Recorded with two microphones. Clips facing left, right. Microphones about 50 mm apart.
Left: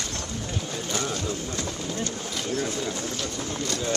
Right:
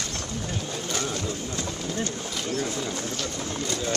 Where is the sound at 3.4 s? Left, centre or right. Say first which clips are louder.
Left 1 dB; right.